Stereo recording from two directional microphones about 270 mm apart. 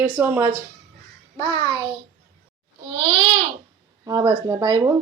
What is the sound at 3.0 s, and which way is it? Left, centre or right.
Babbling, centre.